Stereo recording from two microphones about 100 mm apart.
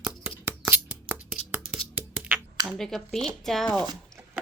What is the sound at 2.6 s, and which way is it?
Speech, 5° left (ahead or behind).